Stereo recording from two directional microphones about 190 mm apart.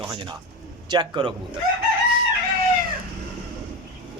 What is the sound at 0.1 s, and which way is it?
Speech, 25° right (ahead or behind).